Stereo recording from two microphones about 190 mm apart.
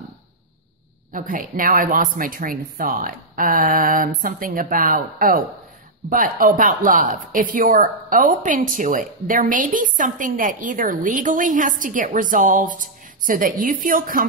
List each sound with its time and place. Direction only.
1.1 s speech: 45° right (ahead or behind)